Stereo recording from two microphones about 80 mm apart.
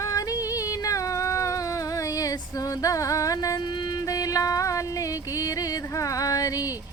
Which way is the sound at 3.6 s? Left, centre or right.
Left.